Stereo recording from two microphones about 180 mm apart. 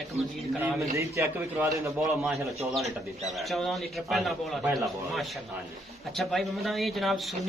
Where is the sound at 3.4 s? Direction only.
Centre (ahead or behind).